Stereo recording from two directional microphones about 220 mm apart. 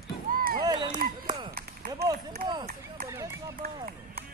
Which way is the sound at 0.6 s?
20° right (ahead or behind).